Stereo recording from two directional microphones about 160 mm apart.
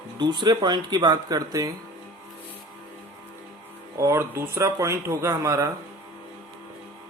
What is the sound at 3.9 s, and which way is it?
Speech, 15° right (ahead or behind).